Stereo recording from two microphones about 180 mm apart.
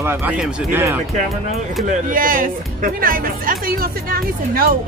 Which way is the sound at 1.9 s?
50° right (ahead or behind).